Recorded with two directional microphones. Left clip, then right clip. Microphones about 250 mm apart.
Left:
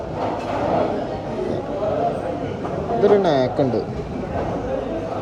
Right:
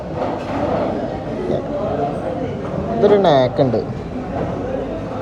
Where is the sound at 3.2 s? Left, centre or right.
Centre.